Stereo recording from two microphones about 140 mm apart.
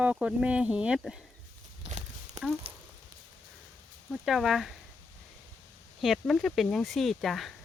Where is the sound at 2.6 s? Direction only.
45° right (ahead or behind).